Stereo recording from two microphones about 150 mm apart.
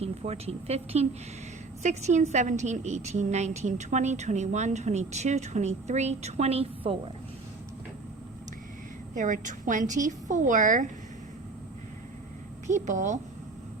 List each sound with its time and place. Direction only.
0.0 s a woman's voice: 45° right (ahead or behind)
9.1 s a woman's voice: 55° right (ahead or behind)
12.6 s a woman's voice: 55° right (ahead or behind)